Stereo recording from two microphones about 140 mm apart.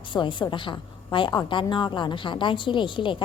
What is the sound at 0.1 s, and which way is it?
A woman's voice, 35° left (ahead or behind).